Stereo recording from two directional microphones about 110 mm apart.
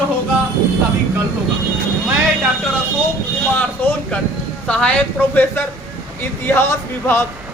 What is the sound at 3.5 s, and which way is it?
Speech, 15° left (ahead or behind).